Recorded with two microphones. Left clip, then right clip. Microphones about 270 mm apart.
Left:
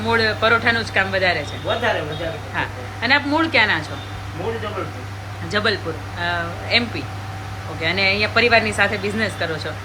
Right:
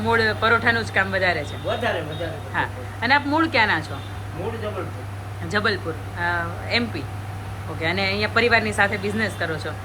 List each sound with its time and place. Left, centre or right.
0.0 s speech: centre
5.5 s speech: centre